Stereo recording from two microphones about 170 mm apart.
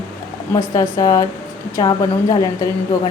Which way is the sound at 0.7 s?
20° left (ahead or behind).